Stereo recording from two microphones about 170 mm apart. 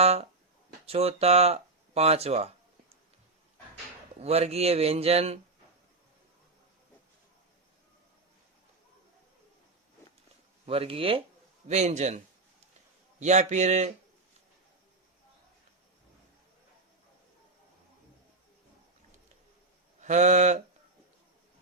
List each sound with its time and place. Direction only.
0.0 s speech: 40° right (ahead or behind)
4.2 s speech: 35° right (ahead or behind)
10.7 s speech: 35° right (ahead or behind)
20.0 s speech: 45° right (ahead or behind)